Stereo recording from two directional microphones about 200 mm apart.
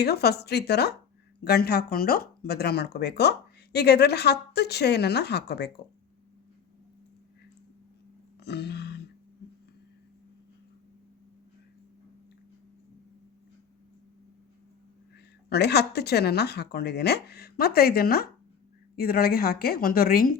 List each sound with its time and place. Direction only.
0.0 s speech: 55° left (ahead or behind)
8.4 s a sound: 55° left (ahead or behind)
15.4 s speech: 55° left (ahead or behind)